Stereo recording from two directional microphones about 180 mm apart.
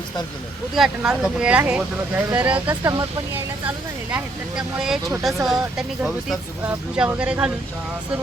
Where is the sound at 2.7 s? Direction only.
20° right (ahead or behind).